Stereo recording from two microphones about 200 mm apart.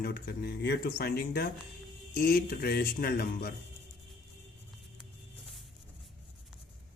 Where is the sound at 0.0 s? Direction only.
55° left (ahead or behind).